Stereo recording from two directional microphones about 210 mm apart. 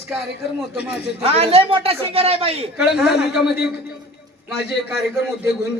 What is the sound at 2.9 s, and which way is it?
Speech, 50° left (ahead or behind).